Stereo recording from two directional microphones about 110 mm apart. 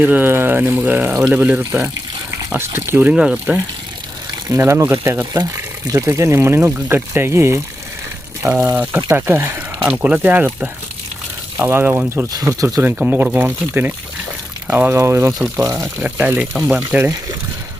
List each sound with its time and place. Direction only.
0.0 s speech: 15° right (ahead or behind)
4.4 s speech: 25° right (ahead or behind)
12.3 s speech: 30° right (ahead or behind)
12.8 s speech: 15° right (ahead or behind)
16.6 s speech: centre (ahead or behind)
16.9 s speech: 20° right (ahead or behind)